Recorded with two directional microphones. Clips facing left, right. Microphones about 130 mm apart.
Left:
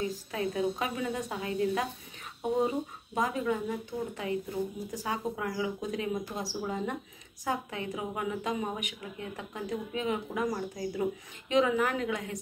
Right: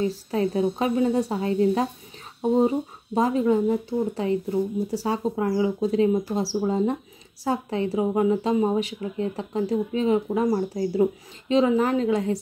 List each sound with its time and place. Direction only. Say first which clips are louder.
0.0 s a woman's voice: right 8 dB; 35° right (ahead or behind)